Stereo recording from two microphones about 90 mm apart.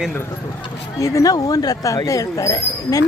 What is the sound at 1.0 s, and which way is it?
Speech, 40° left (ahead or behind).